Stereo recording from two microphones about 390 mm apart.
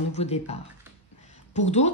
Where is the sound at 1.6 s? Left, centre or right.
Centre.